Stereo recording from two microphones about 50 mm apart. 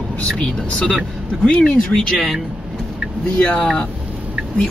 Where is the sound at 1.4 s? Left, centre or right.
Centre.